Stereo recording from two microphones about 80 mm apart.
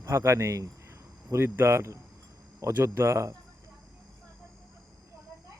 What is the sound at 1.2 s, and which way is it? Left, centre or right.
Speech, right.